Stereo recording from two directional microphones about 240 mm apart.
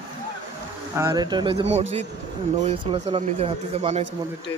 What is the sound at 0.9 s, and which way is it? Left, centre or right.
Speech, centre.